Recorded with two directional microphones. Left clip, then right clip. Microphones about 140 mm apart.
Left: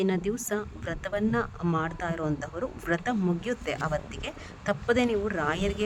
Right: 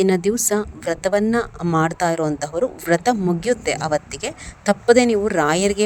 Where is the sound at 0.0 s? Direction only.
50° right (ahead or behind).